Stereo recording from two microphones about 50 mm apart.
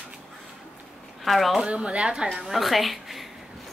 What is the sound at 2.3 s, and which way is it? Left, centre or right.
Speech, centre.